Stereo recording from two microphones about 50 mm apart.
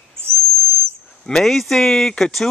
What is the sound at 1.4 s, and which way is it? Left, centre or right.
Speech, centre.